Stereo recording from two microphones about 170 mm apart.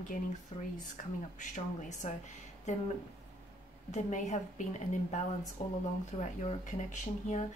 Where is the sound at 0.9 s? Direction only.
45° left (ahead or behind).